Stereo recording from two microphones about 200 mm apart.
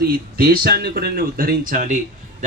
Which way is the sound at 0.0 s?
50° right (ahead or behind).